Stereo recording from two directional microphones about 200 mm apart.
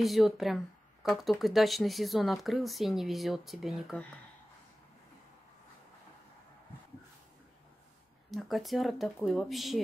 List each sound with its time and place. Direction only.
0.0 s speech: centre (ahead or behind)
8.3 s speech: centre (ahead or behind)